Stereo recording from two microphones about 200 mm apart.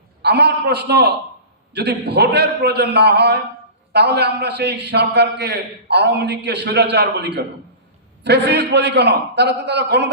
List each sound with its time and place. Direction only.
0.2 s a man's voice: 55° right (ahead or behind)